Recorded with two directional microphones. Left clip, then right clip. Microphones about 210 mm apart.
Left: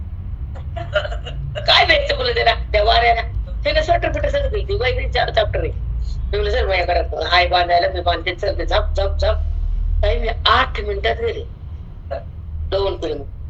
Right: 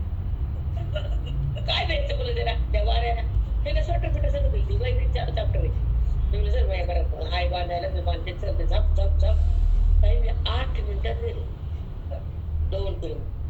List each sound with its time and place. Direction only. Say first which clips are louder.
0.9 s a woman's voice: left 15 dB; 45° left (ahead or behind)
12.7 s a woman's voice: left 12 dB; 45° left (ahead or behind)